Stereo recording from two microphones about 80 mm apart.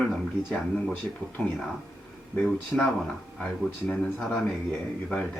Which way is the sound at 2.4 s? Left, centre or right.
Centre.